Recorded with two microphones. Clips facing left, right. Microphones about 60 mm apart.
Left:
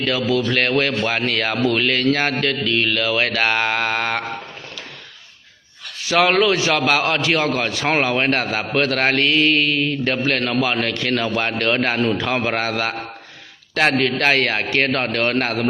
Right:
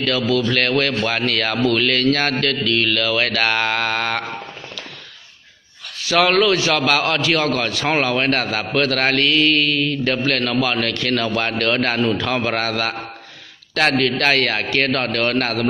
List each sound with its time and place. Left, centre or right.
0.0 s speech: left
6.0 s a man's voice: centre